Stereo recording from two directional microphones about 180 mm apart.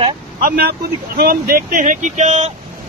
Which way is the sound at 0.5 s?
55° right (ahead or behind).